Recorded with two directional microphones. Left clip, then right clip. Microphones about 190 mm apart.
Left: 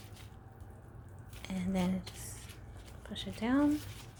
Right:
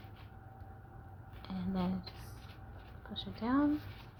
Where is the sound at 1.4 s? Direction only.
20° left (ahead or behind).